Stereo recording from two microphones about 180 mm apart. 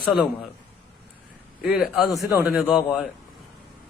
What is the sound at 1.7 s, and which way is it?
A man's voice, 5° right (ahead or behind).